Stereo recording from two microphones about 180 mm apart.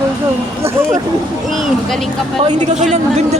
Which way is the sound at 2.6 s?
40° right (ahead or behind).